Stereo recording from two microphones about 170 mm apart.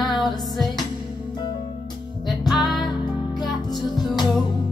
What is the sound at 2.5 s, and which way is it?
Music, centre (ahead or behind).